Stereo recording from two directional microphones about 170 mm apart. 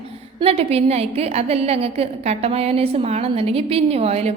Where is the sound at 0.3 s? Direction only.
35° right (ahead or behind).